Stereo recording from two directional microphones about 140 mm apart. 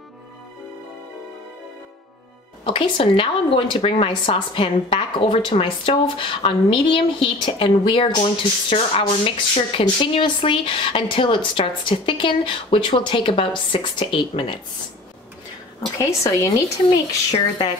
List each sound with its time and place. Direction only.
2.6 s speech: 40° left (ahead or behind)
16.0 s speech: 20° left (ahead or behind)
17.3 s speech: 40° left (ahead or behind)